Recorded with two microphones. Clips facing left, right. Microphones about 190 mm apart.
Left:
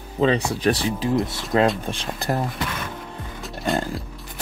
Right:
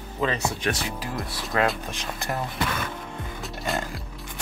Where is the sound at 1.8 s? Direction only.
30° left (ahead or behind).